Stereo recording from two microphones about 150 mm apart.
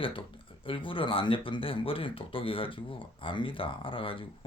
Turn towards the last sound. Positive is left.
turn(degrees=35)  # may be behind; listen again after turning